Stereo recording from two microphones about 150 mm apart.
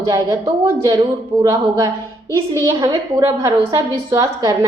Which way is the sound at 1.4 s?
20° right (ahead or behind).